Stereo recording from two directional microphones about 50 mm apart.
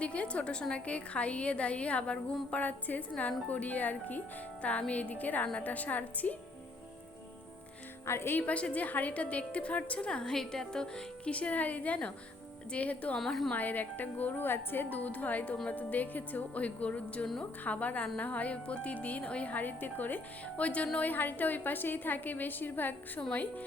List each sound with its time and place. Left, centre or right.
0.0 s a woman's voice: left
8.0 s speech: left
8.4 s speech: left
10.1 s a woman's voice: centre
11.3 s speech: left
13.1 s a woman's voice: centre
13.5 s a woman's voice: left
21.0 s a woman's voice: left